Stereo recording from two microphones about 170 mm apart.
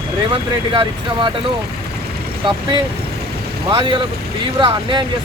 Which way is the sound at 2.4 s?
30° right (ahead or behind).